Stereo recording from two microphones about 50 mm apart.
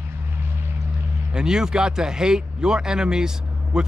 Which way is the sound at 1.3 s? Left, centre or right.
Centre.